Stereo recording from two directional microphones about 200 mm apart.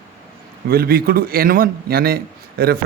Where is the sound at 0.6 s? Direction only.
50° right (ahead or behind).